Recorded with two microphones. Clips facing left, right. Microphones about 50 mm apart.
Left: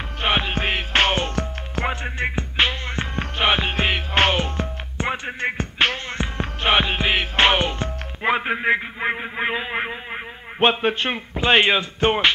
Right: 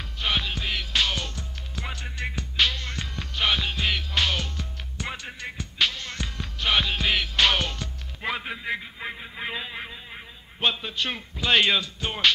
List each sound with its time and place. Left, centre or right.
0.2 s music: left
1.3 s music: left
1.9 s music: left
5.5 s music: left
6.0 s music: left
8.5 s a sound: left
11.0 s speech: left